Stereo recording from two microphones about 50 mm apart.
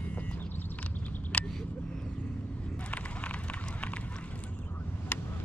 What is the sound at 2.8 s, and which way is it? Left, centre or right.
Run, left.